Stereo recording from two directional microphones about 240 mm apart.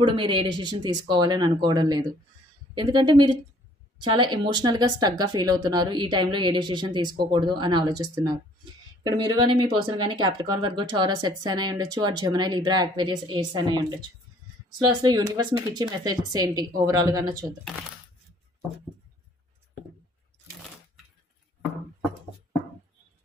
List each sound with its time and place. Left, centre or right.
0.0 s speech: centre
15.0 s speech: centre